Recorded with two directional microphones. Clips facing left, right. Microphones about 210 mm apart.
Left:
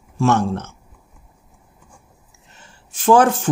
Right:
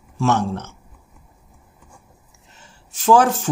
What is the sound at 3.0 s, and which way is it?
Speech, 55° left (ahead or behind).